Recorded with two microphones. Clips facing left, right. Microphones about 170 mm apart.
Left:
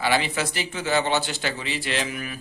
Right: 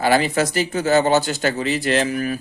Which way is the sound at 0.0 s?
45° right (ahead or behind).